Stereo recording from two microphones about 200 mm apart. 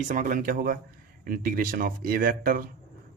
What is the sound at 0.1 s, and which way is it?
A man's voice, 40° right (ahead or behind).